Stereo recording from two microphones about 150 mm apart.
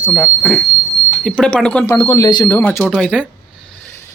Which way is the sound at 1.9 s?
20° left (ahead or behind).